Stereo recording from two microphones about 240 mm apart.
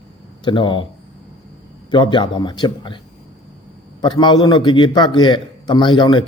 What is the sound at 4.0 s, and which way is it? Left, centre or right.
Speech, centre.